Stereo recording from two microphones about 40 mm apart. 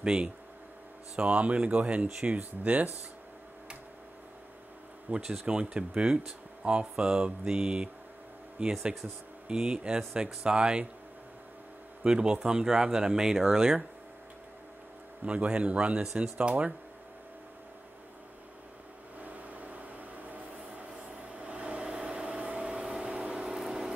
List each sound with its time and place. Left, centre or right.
0.0 s mantra: right
1.1 s speech: right
5.1 s speech: right
5.5 s mantra: right
12.0 s mantra: right
12.4 s speech: centre
15.2 s mantra: right
16.0 s speech: centre
16.3 s mantra: right
19.2 s rub: right
23.0 s vehicle: right
23.4 s a sound: centre